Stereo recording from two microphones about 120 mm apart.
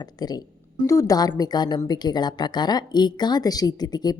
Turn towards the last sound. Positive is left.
turn(degrees=35)  # may be behind; listen again after turning